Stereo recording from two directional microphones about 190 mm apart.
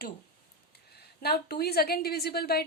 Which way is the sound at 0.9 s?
55° left (ahead or behind).